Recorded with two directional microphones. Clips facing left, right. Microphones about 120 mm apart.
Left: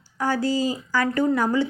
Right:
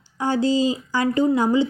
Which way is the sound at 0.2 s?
25° right (ahead or behind).